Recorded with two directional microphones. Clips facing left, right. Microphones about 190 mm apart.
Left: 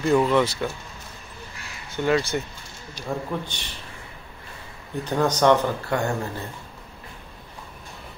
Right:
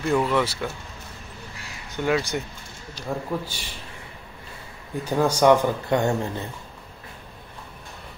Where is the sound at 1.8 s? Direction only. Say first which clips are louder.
Left 1 dB; 15° right (ahead or behind).